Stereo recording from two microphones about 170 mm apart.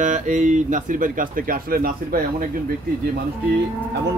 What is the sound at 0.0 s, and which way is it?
Speech, 45° right (ahead or behind).